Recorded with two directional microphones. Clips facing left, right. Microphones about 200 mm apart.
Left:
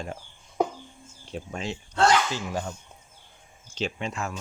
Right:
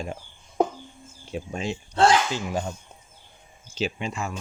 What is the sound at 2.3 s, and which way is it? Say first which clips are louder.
Speech: right 3 dB; 20° right (ahead or behind).